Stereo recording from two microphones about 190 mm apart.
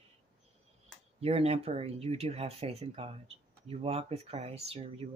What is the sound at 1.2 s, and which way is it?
Speech, 30° right (ahead or behind).